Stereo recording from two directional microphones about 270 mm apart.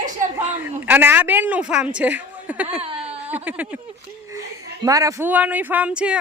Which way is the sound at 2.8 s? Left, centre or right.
Right.